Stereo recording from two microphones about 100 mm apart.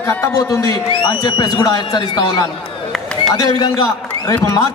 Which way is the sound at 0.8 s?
55° left (ahead or behind).